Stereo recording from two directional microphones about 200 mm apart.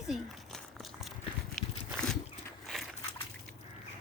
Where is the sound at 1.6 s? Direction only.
Centre (ahead or behind).